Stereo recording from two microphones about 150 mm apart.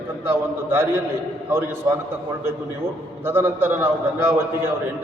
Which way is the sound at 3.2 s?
15° right (ahead or behind).